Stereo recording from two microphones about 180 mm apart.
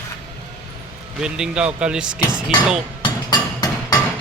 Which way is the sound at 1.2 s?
5° right (ahead or behind).